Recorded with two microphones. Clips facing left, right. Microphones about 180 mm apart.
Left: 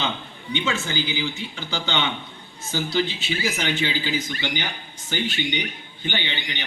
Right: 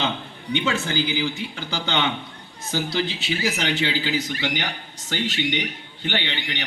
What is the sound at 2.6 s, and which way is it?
A man's voice, 65° right (ahead or behind).